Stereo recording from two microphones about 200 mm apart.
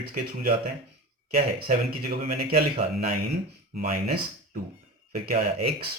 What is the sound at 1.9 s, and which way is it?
Speech, 50° right (ahead or behind).